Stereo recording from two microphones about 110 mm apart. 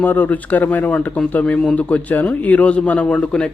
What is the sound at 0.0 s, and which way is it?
A man's voice, 15° left (ahead or behind).